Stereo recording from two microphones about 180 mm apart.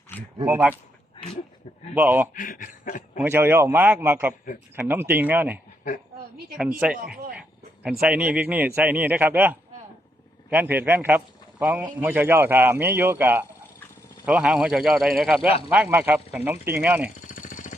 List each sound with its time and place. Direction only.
0.4 s a man's voice: 10° right (ahead or behind)
2.0 s a man's voice: 10° right (ahead or behind)
2.3 s speech: 50° left (ahead or behind)
3.2 s a man's voice: 10° right (ahead or behind)
6.6 s a man's voice: 5° right (ahead or behind)
7.3 s a sound: 5° right (ahead or behind)
8.0 s a man's voice: 5° right (ahead or behind)
17.2 s jackhammer: 45° left (ahead or behind)